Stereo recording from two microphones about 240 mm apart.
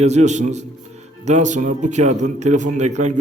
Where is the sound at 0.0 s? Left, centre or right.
Right.